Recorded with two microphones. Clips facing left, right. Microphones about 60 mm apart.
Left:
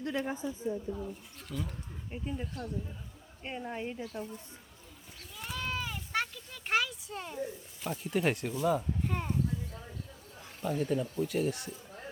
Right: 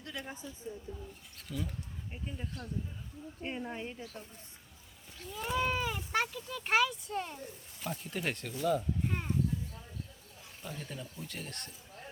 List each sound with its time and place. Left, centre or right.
0.0 s a woman's voice: left
0.7 s speech: left
1.5 s speech: centre
5.3 s sheep: centre
6.1 s speech: centre
9.0 s speech: centre
10.8 s speech: centre